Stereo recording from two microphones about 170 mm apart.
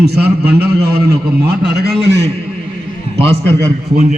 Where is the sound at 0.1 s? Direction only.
70° right (ahead or behind).